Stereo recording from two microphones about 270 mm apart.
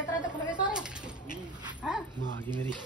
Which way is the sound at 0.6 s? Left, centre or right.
Centre.